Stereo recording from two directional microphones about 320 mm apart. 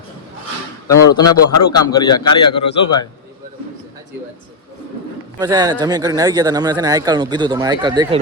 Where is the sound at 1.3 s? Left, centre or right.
Left.